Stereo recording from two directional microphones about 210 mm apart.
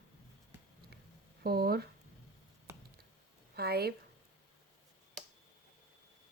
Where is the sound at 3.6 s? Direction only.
50° right (ahead or behind).